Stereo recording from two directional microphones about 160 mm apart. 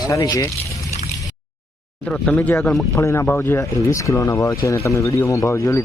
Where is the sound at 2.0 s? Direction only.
5° left (ahead or behind).